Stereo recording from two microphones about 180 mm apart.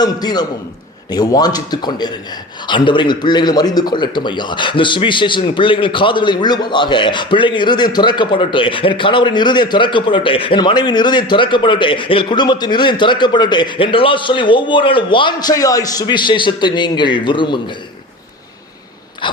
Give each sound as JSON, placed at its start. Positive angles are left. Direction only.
{"t": 0.0, "sound": "speech", "side_deg": 20}
{"t": 19.2, "sound": "speech", "side_deg": 25}